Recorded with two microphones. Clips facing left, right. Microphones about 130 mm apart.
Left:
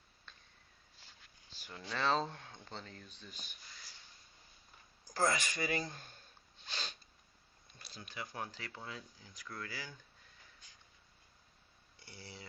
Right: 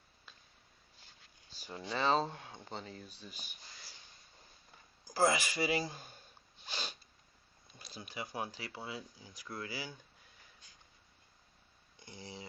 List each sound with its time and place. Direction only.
1.7 s speech: 15° right (ahead or behind)
2.0 s speech: 5° right (ahead or behind)
5.0 s speech: 10° right (ahead or behind)
6.7 s sneeze: 10° right (ahead or behind)
7.9 s speech: 10° right (ahead or behind)
11.9 s speech: 20° right (ahead or behind)